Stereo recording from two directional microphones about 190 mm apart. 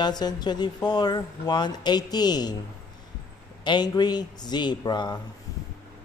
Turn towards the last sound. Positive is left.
turn(degrees=20)  # may be behind; listen again after turning